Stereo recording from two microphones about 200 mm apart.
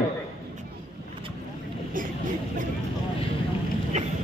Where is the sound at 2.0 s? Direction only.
45° right (ahead or behind).